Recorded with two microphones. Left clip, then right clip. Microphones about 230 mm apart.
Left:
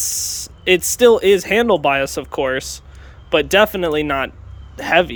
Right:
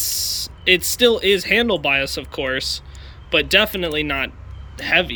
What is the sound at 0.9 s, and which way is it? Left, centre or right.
Speech, centre.